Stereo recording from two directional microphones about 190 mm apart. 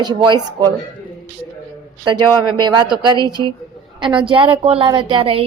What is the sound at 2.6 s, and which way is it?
Speech, 20° right (ahead or behind).